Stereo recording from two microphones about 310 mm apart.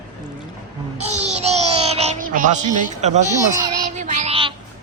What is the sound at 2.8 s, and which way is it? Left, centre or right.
Speech, right.